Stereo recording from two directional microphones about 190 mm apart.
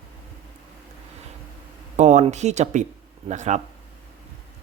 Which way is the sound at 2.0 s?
40° right (ahead or behind).